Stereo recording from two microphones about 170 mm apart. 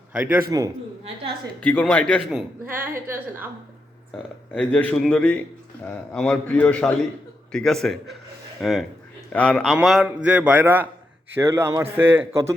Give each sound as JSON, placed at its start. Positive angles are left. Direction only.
{"t": 0.1, "sound": "a man's voice", "side_deg": -10}
{"t": 1.6, "sound": "a man's voice", "side_deg": 10}
{"t": 2.6, "sound": "a man's voice", "side_deg": -10}
{"t": 4.5, "sound": "a man's voice", "side_deg": 5}